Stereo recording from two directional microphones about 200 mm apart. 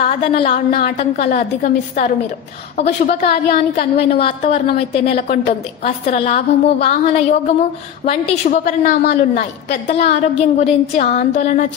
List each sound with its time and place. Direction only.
0.2 s a woman's voice: 25° left (ahead or behind)
0.5 s a woman's voice: 50° left (ahead or behind)
1.1 s a woman's voice: 35° left (ahead or behind)
4.1 s a woman's voice: 30° left (ahead or behind)
8.5 s a woman's voice: 40° left (ahead or behind)